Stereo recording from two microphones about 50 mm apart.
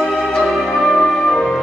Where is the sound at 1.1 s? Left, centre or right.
Centre.